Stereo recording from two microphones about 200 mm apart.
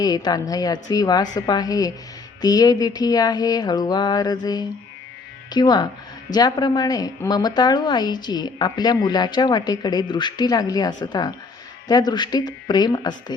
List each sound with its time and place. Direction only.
0.0 s a woman's voice: 20° left (ahead or behind)